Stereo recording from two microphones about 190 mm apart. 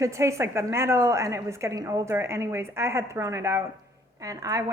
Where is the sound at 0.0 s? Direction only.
15° right (ahead or behind).